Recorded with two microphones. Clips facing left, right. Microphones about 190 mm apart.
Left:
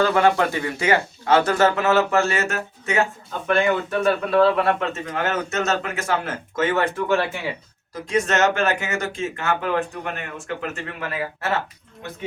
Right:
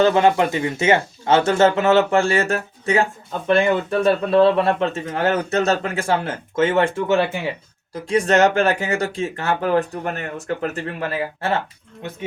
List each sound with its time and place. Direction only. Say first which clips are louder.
0.0 s speech: right 3 dB; 20° right (ahead or behind)